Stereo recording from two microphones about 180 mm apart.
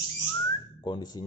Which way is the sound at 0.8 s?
25° left (ahead or behind).